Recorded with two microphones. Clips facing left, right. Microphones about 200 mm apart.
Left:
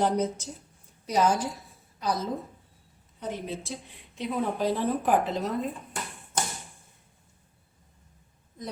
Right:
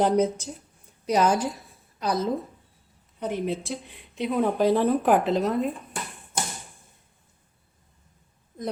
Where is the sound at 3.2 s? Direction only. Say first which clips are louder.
Right 6 dB; 65° right (ahead or behind).